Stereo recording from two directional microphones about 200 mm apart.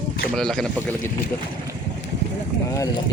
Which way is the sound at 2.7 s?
15° left (ahead or behind).